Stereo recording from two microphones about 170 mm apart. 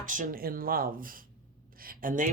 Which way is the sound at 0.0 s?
50° right (ahead or behind).